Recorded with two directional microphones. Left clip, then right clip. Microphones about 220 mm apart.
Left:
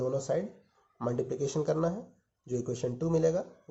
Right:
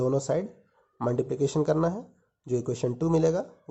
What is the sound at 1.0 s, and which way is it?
Speech, 30° right (ahead or behind).